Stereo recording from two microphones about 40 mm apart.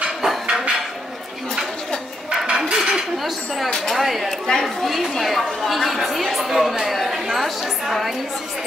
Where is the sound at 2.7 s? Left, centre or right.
Centre.